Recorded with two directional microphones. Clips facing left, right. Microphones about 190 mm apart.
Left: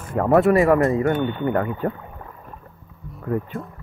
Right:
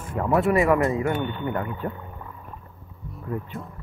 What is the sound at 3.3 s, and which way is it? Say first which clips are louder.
Speech: left 7 dB; 60° left (ahead or behind).